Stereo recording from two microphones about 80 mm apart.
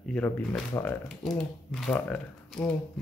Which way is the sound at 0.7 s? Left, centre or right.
Left.